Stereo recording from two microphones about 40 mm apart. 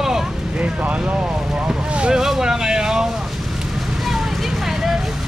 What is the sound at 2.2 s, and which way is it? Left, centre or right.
Speech, centre.